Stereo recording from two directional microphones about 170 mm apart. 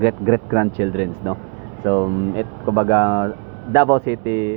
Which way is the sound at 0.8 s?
45° left (ahead or behind).